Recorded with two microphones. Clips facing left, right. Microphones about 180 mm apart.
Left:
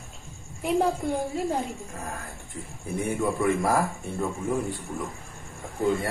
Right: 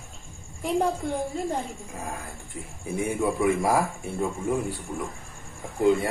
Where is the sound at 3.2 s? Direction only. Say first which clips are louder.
Right 1 dB; 10° right (ahead or behind).